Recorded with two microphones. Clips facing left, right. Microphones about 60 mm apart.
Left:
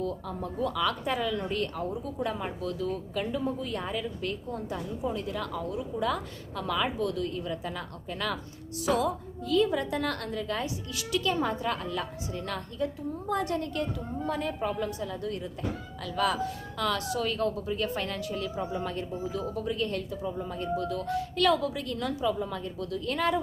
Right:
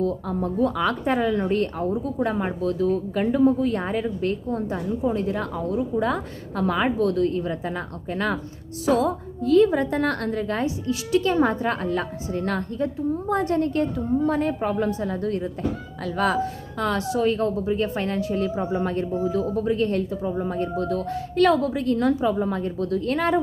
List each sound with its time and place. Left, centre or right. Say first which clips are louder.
0.0 s a woman's voice: right 8 dB; right